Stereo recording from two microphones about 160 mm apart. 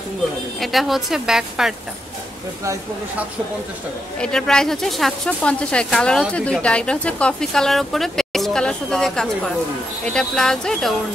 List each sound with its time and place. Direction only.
0.6 s speech: centre (ahead or behind)
2.6 s speech: 20° right (ahead or behind)
4.2 s speech: 5° left (ahead or behind)